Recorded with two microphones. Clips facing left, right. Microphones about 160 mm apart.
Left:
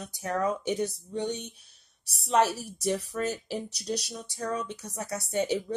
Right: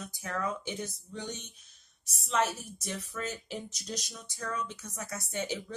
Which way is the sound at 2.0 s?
35° left (ahead or behind).